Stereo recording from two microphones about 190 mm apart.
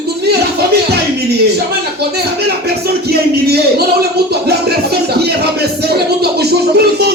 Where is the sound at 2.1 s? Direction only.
55° right (ahead or behind).